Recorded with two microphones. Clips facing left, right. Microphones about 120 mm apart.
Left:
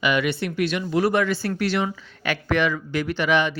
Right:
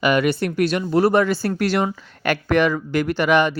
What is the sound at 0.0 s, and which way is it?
Speech, 45° right (ahead or behind).